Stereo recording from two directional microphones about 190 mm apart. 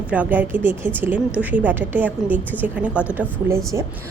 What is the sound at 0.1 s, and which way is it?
A woman's voice, 10° right (ahead or behind).